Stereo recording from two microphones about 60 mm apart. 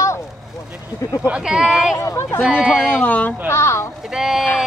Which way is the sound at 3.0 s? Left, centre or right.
Left.